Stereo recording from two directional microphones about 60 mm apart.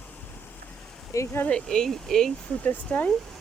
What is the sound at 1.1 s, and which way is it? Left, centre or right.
Speech, left.